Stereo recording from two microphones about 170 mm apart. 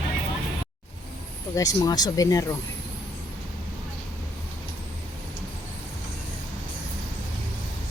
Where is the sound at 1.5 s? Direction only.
20° left (ahead or behind).